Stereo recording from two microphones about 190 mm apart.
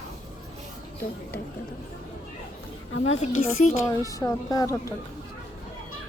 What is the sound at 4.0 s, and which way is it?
Speech, 15° left (ahead or behind).